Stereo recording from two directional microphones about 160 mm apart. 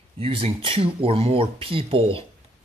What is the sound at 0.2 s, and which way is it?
Speech, 35° right (ahead or behind).